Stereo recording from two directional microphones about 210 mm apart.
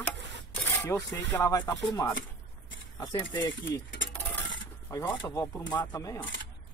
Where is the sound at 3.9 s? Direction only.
60° left (ahead or behind).